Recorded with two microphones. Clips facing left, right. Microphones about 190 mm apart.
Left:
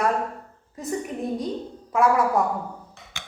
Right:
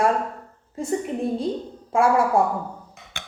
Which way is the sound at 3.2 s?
60° right (ahead or behind).